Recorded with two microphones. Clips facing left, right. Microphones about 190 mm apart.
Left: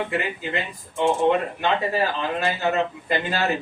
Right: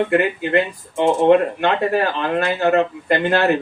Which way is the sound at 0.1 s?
65° right (ahead or behind).